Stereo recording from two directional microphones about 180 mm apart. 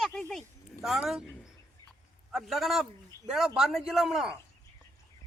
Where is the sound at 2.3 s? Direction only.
Centre (ahead or behind).